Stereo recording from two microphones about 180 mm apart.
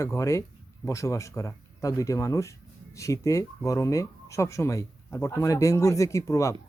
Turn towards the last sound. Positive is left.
turn(degrees=15)  # may be behind; listen again after turning